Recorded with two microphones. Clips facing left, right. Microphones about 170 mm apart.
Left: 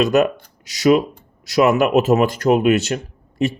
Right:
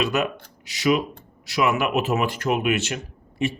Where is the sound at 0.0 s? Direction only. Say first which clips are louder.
Left 8 dB; 45° left (ahead or behind).